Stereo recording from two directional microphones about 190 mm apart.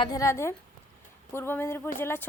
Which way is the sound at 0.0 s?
20° left (ahead or behind).